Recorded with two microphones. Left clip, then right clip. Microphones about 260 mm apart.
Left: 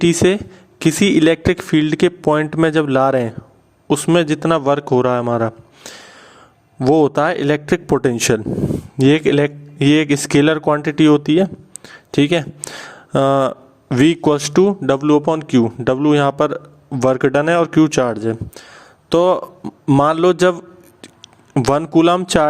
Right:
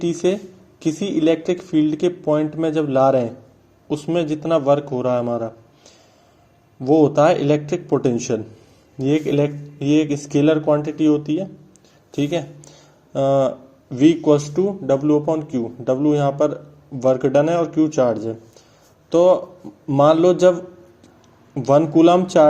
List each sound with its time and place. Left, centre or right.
0.0 s a man's voice: left